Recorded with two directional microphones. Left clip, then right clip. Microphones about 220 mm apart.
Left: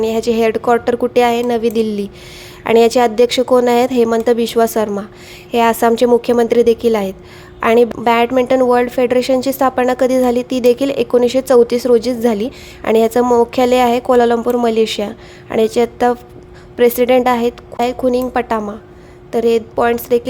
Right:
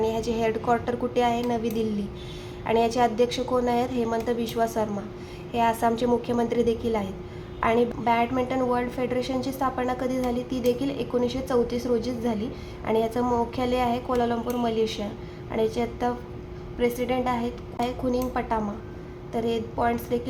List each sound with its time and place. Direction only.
0.0 s a woman's voice: 40° left (ahead or behind)